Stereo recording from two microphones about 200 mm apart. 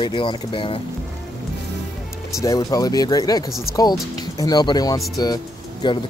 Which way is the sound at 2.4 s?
20° left (ahead or behind).